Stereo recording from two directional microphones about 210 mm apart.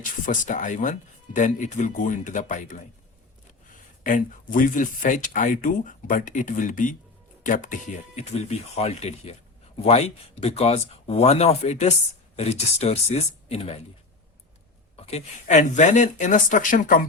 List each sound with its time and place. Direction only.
0.3 s speech: 35° left (ahead or behind)
4.0 s speech: 40° left (ahead or behind)
14.9 s speech: 30° left (ahead or behind)